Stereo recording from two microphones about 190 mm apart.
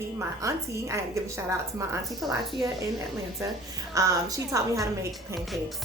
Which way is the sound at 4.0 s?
15° right (ahead or behind).